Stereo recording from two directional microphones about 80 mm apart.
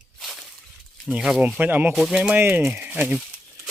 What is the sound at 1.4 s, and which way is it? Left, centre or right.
Speech, centre.